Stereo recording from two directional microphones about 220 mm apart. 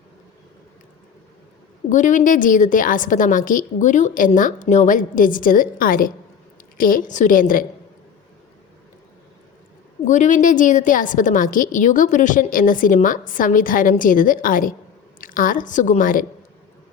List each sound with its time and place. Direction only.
1.9 s a woman's voice: 35° left (ahead or behind)
10.0 s a woman's voice: 35° left (ahead or behind)